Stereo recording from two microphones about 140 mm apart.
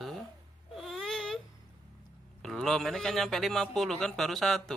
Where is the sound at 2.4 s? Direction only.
Centre (ahead or behind).